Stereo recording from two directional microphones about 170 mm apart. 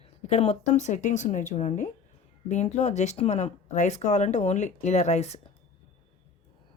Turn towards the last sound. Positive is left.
turn(degrees=40)  # may be behind; listen again after turning